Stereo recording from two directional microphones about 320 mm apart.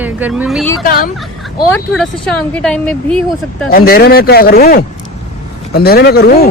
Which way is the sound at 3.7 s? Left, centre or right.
Left.